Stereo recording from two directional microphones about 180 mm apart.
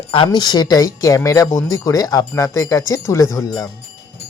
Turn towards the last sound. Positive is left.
turn(degrees=20)  # may be behind; listen again after turning